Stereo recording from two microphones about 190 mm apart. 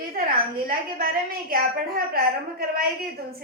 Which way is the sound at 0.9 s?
50° right (ahead or behind).